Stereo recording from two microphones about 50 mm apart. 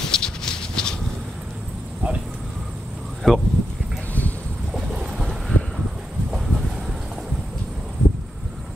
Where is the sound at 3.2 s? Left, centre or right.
Centre.